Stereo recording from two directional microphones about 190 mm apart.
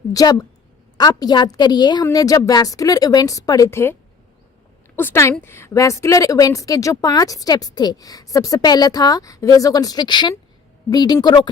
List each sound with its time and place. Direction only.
0.1 s a woman's voice: 20° left (ahead or behind)
4.9 s a woman's voice: 15° left (ahead or behind)